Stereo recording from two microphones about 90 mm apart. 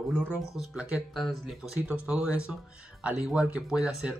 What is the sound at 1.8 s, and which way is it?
Speech, 15° right (ahead or behind).